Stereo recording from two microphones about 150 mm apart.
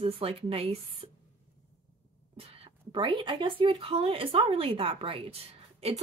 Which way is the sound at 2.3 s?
40° right (ahead or behind).